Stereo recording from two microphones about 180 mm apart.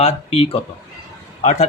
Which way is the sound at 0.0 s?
30° left (ahead or behind).